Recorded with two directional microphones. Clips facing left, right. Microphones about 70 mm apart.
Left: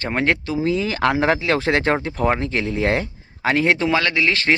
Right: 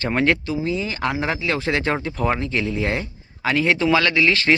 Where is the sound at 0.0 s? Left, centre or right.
Left.